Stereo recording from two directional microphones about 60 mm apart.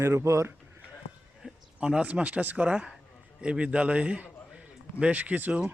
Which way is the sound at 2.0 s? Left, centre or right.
Right.